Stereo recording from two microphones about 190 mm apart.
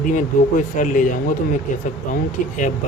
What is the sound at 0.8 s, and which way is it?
Speech, 45° left (ahead or behind).